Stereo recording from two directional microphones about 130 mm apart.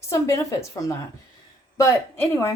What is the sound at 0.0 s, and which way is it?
Speech, 25° left (ahead or behind).